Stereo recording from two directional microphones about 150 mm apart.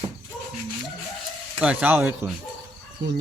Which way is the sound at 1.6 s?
10° right (ahead or behind).